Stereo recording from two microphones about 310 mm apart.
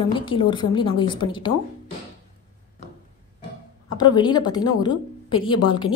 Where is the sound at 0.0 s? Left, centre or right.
Centre.